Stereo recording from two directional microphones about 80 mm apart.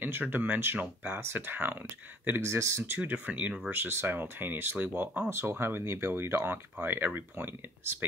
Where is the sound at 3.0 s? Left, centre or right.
Right.